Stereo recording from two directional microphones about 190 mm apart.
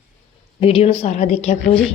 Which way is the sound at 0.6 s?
30° left (ahead or behind).